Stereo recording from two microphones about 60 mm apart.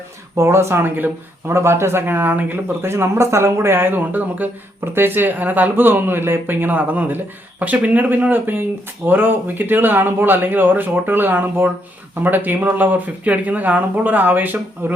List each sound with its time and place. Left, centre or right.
0.3 s speech: right
1.5 s speech: right
2.0 s speech: right